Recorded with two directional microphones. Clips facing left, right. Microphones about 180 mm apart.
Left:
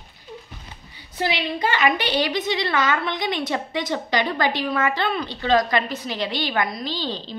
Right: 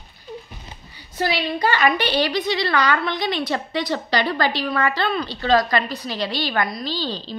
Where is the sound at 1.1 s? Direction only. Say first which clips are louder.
Right 2 dB; 20° left (ahead or behind).